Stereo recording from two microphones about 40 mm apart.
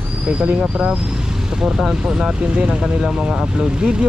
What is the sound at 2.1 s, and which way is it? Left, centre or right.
Speech, right.